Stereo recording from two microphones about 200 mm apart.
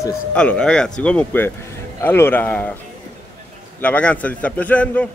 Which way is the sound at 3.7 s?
5° left (ahead or behind).